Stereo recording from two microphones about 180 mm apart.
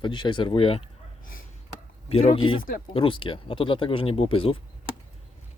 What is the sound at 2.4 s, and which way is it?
Speech, 30° left (ahead or behind).